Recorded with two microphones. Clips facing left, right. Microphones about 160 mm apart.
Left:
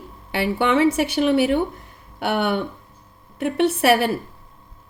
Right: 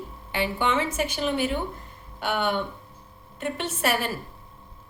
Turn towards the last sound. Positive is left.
turn(degrees=65)  # may be behind; listen again after turning